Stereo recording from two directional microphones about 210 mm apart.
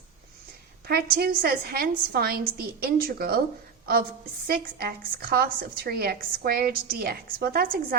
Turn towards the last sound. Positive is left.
turn(degrees=-45)  # may be behind; listen again after turning